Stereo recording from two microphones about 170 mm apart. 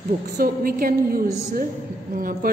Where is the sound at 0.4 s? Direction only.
55° right (ahead or behind).